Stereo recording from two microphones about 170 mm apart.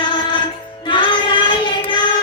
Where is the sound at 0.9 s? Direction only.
30° left (ahead or behind).